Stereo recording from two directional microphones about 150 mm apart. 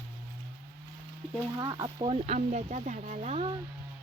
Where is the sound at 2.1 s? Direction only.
45° right (ahead or behind).